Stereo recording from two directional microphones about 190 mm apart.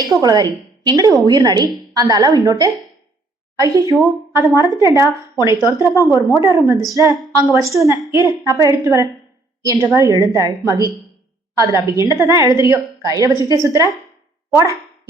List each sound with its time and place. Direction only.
0.1 s a woman's voice: 20° right (ahead or behind)